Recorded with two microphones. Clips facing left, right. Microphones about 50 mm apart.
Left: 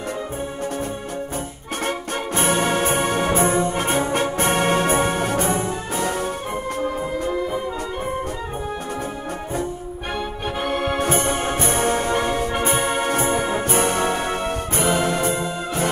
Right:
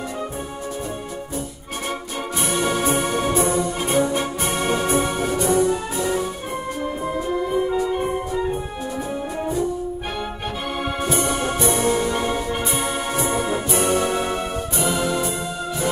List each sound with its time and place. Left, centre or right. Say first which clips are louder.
2.3 s music: left 2 dB; left
5.5 s music: right 5 dB; left
5.9 s music: right 1 dB; left
11.0 s music: left 1 dB; left